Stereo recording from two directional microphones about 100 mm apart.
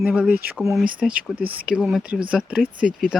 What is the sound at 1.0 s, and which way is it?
Speech, centre (ahead or behind).